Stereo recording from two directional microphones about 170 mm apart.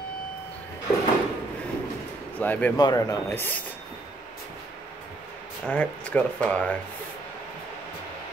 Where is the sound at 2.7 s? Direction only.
20° left (ahead or behind).